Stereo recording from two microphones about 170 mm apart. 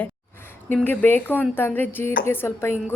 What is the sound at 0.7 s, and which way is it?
Speech, 10° left (ahead or behind).